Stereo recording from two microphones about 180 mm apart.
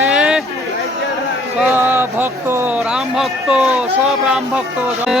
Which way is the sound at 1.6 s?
10° right (ahead or behind).